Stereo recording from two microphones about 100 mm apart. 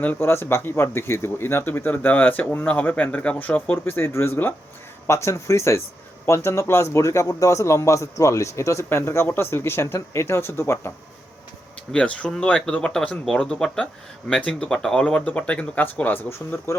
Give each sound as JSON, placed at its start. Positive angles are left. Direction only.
{"t": 0.0, "sound": "speech", "side_deg": 20}
{"t": 11.9, "sound": "speech", "side_deg": 10}